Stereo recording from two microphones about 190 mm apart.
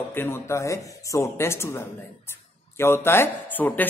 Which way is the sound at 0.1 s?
10° left (ahead or behind).